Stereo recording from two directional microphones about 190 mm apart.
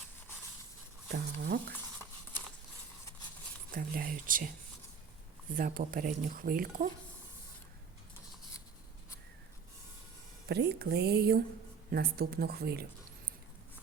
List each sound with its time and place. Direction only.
1.1 s speech: 55° right (ahead or behind)
3.7 s speech: 50° right (ahead or behind)
5.5 s speech: 45° right (ahead or behind)
10.5 s speech: 60° right (ahead or behind)